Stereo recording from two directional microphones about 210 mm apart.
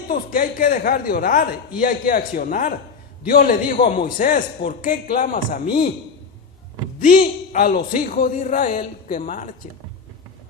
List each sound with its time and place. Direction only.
0.1 s a man's voice: 40° left (ahead or behind)
7.0 s a man's voice: 45° left (ahead or behind)